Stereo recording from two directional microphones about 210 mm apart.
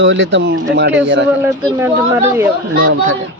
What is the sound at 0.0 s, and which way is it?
Speech, 60° right (ahead or behind).